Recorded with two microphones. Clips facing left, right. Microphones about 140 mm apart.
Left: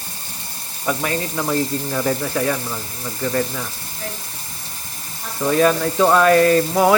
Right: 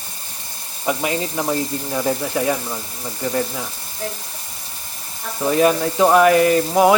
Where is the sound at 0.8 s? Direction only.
20° right (ahead or behind).